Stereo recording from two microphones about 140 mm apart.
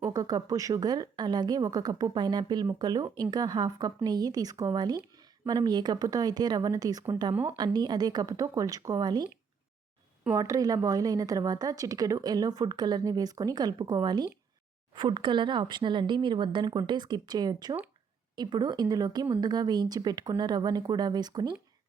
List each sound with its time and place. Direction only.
0.1 s a woman's voice: 30° right (ahead or behind)
10.3 s a woman's voice: 25° right (ahead or behind)